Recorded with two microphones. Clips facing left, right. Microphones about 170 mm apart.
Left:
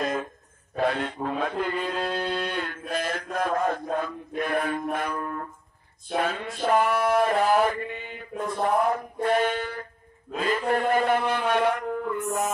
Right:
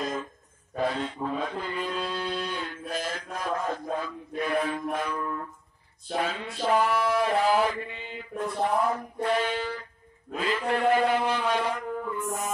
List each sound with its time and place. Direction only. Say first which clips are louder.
0.0 s a sound: left 4 dB; 65° left (ahead or behind)
0.7 s a man's voice: left 3 dB; 65° left (ahead or behind)
6.1 s male singing: left 3 dB; 55° left (ahead or behind)
8.6 s speech: left 4 dB; 55° left (ahead or behind)